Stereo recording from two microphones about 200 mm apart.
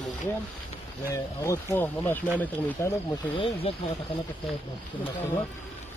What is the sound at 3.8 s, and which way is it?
Speech, 30° left (ahead or behind).